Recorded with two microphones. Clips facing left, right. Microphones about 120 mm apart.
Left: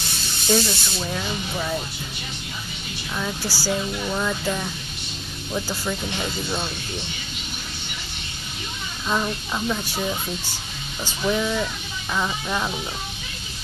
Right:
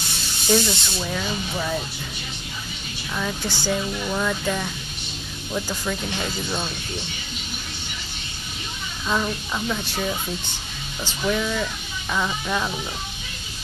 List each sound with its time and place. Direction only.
0.5 s speech: centre (ahead or behind)
3.2 s speech: 5° left (ahead or behind)
9.0 s speech: 10° left (ahead or behind)